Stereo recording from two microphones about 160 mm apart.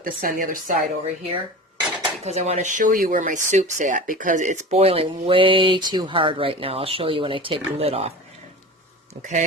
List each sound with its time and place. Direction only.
0.0 s speech: 60° right (ahead or behind)
2.2 s speech: 45° right (ahead or behind)